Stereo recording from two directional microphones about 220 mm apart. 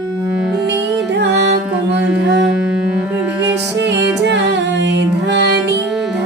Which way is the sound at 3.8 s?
50° right (ahead or behind).